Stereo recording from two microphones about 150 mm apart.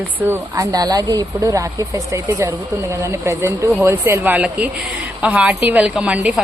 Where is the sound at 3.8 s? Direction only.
15° right (ahead or behind).